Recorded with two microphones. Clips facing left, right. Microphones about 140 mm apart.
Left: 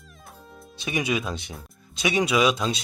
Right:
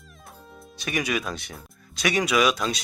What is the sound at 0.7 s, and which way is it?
A man's voice, 20° left (ahead or behind).